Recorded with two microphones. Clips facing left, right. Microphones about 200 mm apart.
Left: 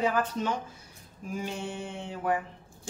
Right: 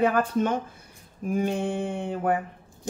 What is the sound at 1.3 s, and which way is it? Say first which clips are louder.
Speech: right 9 dB; 55° right (ahead or behind).